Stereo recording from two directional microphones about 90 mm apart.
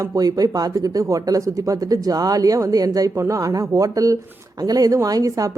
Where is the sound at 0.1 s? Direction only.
45° right (ahead or behind).